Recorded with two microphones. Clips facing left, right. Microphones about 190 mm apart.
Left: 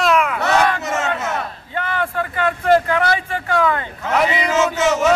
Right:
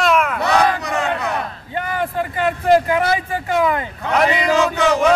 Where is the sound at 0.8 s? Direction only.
20° left (ahead or behind).